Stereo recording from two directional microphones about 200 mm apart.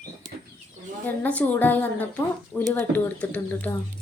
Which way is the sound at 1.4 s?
10° left (ahead or behind).